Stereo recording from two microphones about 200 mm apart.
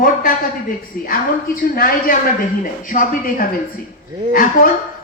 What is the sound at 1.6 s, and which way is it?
Speech, 50° left (ahead or behind).